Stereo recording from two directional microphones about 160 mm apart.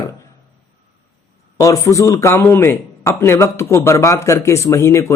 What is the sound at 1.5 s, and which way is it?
Speech, 20° left (ahead or behind).